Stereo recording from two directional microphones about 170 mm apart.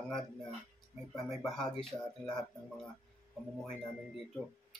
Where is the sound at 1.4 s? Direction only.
25° left (ahead or behind).